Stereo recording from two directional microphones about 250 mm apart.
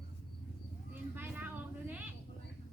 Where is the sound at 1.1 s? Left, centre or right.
Centre.